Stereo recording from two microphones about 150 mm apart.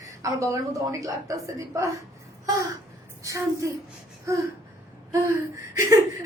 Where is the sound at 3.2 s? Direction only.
20° right (ahead or behind).